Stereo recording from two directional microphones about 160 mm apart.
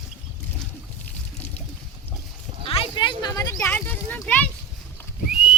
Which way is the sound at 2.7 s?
30° left (ahead or behind).